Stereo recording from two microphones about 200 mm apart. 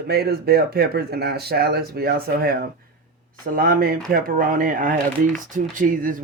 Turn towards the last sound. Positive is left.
turn(degrees=-40)  # may be behind; listen again after turning